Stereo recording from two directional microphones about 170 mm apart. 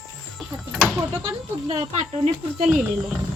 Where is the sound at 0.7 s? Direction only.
Centre (ahead or behind).